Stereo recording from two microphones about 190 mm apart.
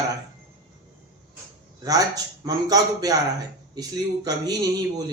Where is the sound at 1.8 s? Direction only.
20° right (ahead or behind).